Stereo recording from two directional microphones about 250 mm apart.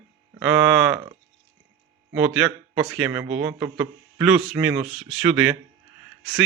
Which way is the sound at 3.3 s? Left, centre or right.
Right.